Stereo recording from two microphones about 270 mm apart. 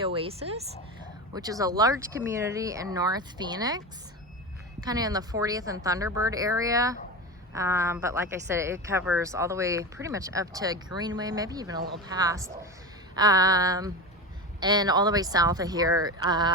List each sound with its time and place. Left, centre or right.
0.0 s a woman's voice: centre